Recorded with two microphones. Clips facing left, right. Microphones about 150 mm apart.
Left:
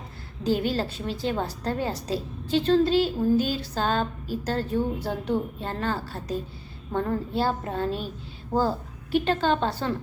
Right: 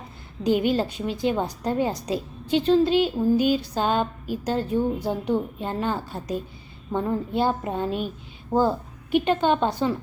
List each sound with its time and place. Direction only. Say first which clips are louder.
0.4 s a woman's voice: right 3 dB; 15° right (ahead or behind)